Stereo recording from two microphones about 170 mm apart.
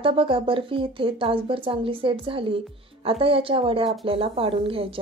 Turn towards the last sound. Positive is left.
turn(degrees=-35)  # may be behind; listen again after turning